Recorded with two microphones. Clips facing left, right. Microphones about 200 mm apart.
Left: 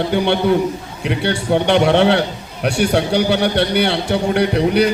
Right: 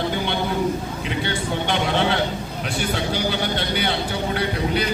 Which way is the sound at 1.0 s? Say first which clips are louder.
Left 9 dB; 65° left (ahead or behind).